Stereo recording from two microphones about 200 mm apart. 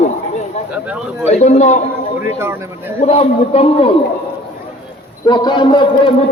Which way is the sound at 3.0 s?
30° left (ahead or behind).